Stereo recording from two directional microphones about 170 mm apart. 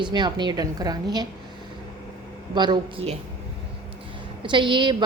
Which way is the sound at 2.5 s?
25° right (ahead or behind).